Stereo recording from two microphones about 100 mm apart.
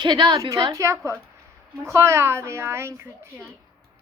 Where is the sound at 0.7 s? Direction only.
30° right (ahead or behind).